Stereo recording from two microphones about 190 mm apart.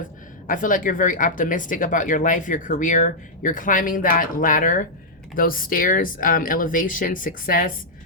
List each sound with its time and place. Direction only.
0.4 s speech: 45° left (ahead or behind)